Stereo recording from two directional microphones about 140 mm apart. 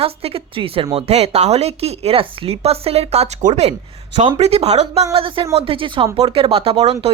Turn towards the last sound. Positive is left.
turn(degrees=-45)  # may be behind; listen again after turning